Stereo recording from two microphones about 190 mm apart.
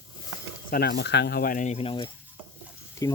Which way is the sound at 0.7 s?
55° left (ahead or behind).